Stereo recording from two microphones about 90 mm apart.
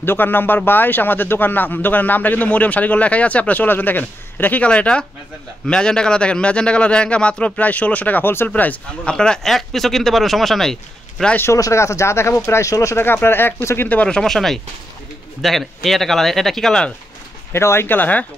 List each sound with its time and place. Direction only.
0.0 s a man's voice: 25° left (ahead or behind); by 11.3 s 5° left (ahead or behind)
11.3 s speech: 30° left (ahead or behind)
13.8 s a man's voice: 15° left (ahead or behind)
17.5 s speech: 30° left (ahead or behind)